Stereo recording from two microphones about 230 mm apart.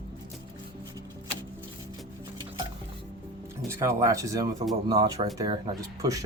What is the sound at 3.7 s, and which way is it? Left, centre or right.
Speech, centre.